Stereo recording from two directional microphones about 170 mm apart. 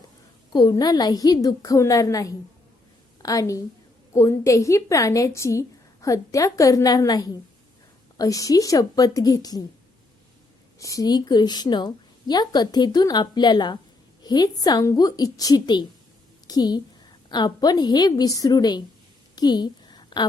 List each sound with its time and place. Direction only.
0.5 s a woman's voice: 25° left (ahead or behind)
10.8 s a woman's voice: 20° left (ahead or behind)
19.4 s a sound: 25° left (ahead or behind)